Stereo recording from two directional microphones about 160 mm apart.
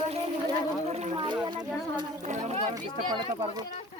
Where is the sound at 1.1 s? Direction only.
30° right (ahead or behind).